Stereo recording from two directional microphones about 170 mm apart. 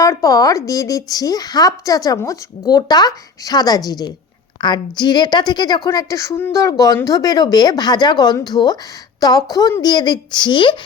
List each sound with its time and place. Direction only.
0.0 s a woman's voice: 20° left (ahead or behind)